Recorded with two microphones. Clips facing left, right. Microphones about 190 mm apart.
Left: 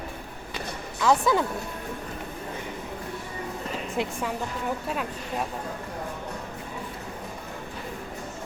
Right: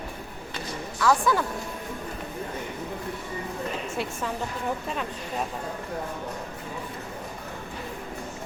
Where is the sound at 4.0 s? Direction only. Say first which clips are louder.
Left 4 dB; 20° left (ahead or behind).